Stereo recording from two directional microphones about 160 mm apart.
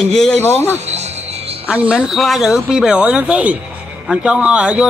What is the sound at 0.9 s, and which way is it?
Music, 45° right (ahead or behind).